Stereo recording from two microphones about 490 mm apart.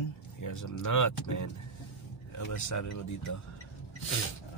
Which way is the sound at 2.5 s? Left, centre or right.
Left.